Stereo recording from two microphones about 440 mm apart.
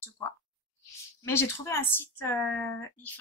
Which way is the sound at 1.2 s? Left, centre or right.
Centre.